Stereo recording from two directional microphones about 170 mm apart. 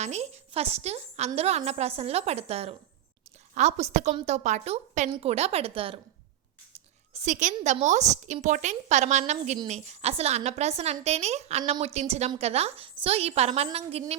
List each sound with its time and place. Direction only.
0.0 s a woman's voice: 40° right (ahead or behind)